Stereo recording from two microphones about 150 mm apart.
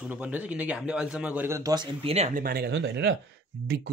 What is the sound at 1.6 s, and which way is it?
Speech, 25° right (ahead or behind).